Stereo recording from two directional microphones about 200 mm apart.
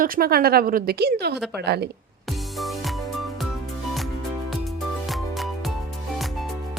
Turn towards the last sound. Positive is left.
turn(degrees=0)  # may be behind; listen again after turning